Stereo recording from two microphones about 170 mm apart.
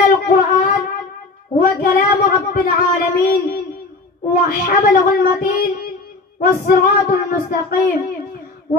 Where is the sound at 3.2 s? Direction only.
60° left (ahead or behind).